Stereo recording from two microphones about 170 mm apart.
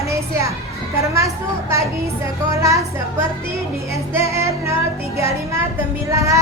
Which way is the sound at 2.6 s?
20° right (ahead or behind).